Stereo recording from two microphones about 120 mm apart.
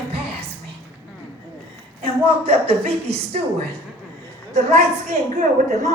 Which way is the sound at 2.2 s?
55° right (ahead or behind).